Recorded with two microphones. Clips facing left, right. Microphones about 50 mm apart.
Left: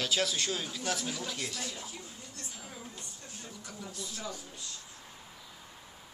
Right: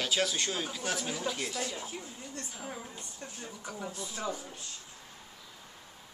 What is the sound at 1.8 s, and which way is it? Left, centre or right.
Speech, right.